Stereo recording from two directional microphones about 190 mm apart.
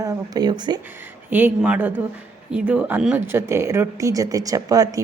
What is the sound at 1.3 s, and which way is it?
Speech, 10° right (ahead or behind).